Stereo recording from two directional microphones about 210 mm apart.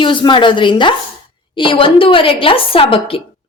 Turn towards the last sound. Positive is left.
turn(degrees=25)  # may be behind; listen again after turning